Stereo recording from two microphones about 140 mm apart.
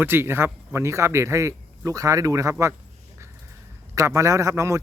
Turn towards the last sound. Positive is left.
turn(degrees=-20)  # may be behind; listen again after turning